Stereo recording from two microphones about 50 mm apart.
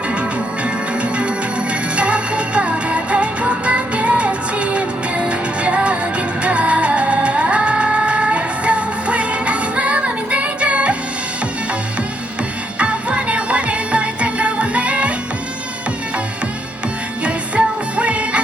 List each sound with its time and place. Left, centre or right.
2.0 s music: right
12.8 s music: right
17.2 s music: right